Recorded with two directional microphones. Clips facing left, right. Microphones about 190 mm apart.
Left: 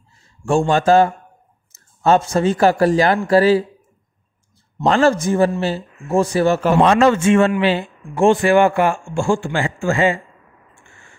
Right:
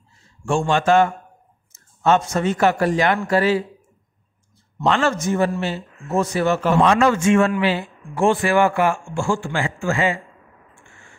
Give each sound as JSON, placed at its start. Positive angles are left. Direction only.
{"t": 0.5, "sound": "speech", "side_deg": 40}
{"t": 4.8, "sound": "speech", "side_deg": 40}